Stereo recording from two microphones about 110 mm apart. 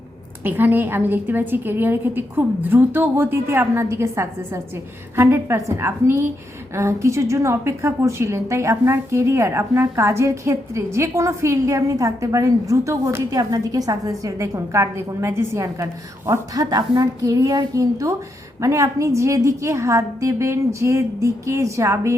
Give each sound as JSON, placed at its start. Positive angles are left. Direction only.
{"t": 0.4, "sound": "a woman's voice", "side_deg": -20}